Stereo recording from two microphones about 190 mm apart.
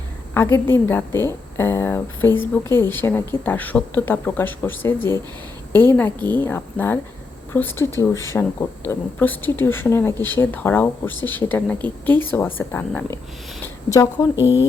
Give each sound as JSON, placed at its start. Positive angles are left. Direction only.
{"t": 0.3, "sound": "a woman's voice", "side_deg": 10}
{"t": 14.3, "sound": "speech", "side_deg": -10}